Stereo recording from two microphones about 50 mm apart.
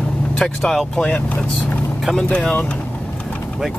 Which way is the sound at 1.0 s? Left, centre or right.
Left.